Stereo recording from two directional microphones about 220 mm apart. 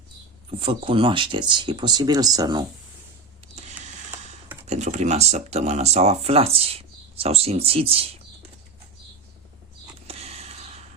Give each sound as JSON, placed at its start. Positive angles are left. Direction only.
{"t": 0.6, "sound": "speech", "side_deg": -25}
{"t": 3.5, "sound": "printer", "side_deg": -30}
{"t": 4.6, "sound": "speech", "side_deg": -30}
{"t": 10.1, "sound": "a sound", "side_deg": -30}